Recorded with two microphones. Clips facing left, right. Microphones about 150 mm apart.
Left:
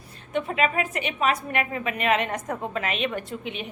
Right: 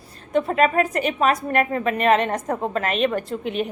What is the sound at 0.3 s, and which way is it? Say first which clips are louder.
A woman's voice: right 6 dB; 40° right (ahead or behind).